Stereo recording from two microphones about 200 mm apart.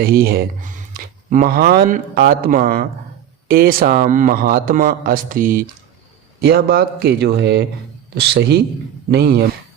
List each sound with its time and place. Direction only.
0.0 s speech: 50° right (ahead or behind)